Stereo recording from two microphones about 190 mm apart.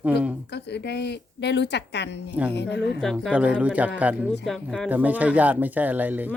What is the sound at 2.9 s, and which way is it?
A woman's voice, centre (ahead or behind).